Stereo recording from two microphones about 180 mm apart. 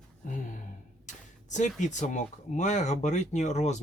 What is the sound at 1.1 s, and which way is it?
Speech, 40° left (ahead or behind).